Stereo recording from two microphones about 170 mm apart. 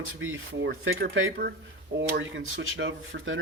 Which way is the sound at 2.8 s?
90° right.